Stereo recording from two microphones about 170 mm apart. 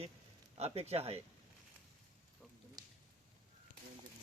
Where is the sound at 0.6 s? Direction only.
35° right (ahead or behind).